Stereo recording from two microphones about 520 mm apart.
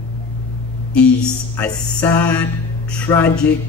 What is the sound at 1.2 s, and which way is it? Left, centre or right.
Speech, centre.